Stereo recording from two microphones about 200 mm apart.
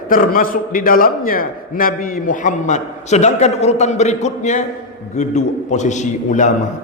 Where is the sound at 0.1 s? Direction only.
45° left (ahead or behind).